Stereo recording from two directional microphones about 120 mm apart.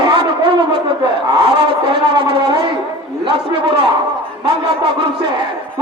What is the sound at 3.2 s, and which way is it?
Speech, 45° right (ahead or behind).